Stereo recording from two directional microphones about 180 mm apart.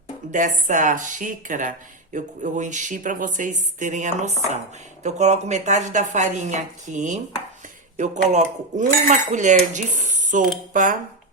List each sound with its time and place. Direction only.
0.3 s cutlery: 45° right (ahead or behind)